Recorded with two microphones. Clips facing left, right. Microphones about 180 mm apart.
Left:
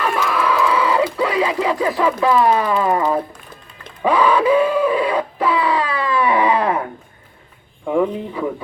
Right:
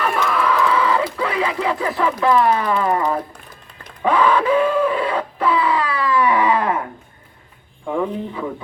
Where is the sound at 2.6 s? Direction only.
15° left (ahead or behind).